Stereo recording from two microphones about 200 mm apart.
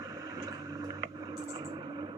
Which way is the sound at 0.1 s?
15° right (ahead or behind).